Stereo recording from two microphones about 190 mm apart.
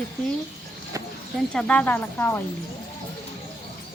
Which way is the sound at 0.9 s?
15° right (ahead or behind).